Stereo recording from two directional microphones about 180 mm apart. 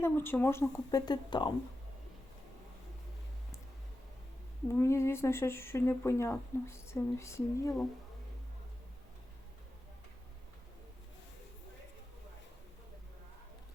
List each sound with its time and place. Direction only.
0.0 s speech: 15° left (ahead or behind)
4.7 s speech: 15° left (ahead or behind)